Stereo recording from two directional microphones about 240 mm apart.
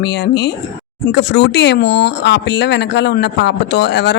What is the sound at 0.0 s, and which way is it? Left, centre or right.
Speech, left.